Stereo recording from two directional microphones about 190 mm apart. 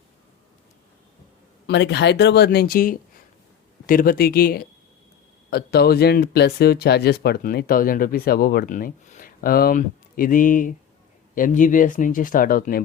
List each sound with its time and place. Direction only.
1.6 s speech: 65° left (ahead or behind); by 12.8 s 45° left (ahead or behind)